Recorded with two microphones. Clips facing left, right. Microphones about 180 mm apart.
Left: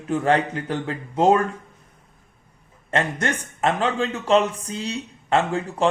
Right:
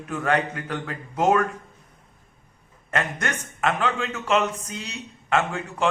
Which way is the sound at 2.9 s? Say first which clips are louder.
Left 4 dB; 30° left (ahead or behind).